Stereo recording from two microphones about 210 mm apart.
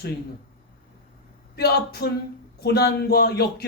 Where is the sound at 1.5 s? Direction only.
50° left (ahead or behind).